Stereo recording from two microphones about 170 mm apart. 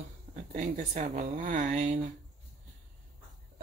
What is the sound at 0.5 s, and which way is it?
Speech, 45° right (ahead or behind).